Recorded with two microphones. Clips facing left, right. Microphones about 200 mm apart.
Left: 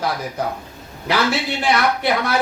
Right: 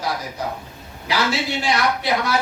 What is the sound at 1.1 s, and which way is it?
Speech, 60° left (ahead or behind).